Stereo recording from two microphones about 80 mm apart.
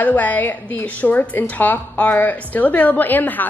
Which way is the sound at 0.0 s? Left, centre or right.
Left.